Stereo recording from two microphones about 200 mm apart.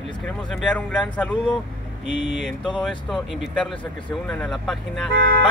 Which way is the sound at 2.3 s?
Centre (ahead or behind).